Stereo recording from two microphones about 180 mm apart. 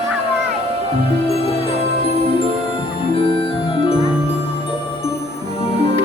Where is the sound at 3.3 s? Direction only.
30° left (ahead or behind).